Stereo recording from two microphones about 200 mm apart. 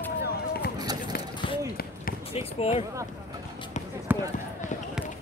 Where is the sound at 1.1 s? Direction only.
50° left (ahead or behind).